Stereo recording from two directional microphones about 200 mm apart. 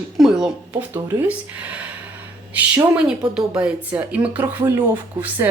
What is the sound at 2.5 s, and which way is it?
A woman's voice, 10° right (ahead or behind).